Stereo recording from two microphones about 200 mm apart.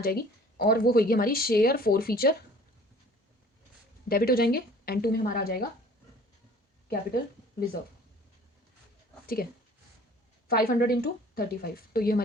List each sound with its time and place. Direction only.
0.0 s speech: 50° left (ahead or behind)
4.1 s speech: 50° left (ahead or behind)
9.2 s speech: 50° left (ahead or behind)
10.5 s speech: 50° left (ahead or behind)